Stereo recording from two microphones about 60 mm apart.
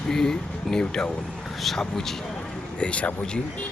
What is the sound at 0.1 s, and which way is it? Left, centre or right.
Speech, centre.